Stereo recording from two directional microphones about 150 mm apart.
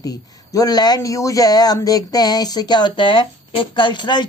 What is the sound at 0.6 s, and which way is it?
A woman's voice, 25° left (ahead or behind).